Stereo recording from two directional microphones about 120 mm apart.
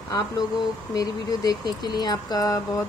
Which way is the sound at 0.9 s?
30° left (ahead or behind).